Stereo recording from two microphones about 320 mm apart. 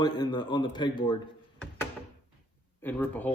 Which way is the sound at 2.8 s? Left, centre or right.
Centre.